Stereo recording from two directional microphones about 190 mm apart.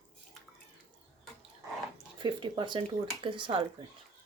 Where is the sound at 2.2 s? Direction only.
25° right (ahead or behind).